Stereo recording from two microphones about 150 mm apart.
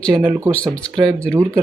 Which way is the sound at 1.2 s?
20° right (ahead or behind).